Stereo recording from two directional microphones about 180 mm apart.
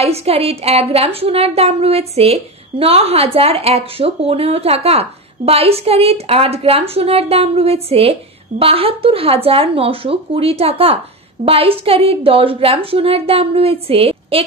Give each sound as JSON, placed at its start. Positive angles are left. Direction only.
{"t": 0.0, "sound": "a woman's voice", "side_deg": -35}